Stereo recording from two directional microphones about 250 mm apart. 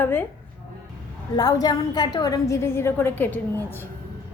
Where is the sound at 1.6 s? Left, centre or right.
Centre.